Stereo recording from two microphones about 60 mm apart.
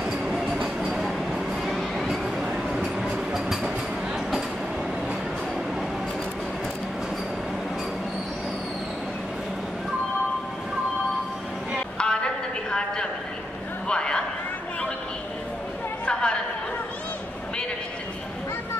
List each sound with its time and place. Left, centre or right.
0.0 s vehicle: centre
12.0 s a sound: centre
13.8 s vehicle: centre
16.1 s chatter: centre